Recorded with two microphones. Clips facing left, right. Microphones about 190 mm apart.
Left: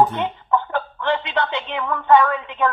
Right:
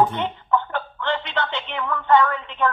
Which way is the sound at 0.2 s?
15° left (ahead or behind).